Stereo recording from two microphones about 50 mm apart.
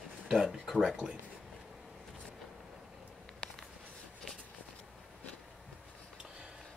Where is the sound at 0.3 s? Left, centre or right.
Centre.